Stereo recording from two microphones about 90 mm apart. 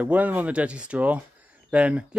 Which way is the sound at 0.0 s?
15° right (ahead or behind).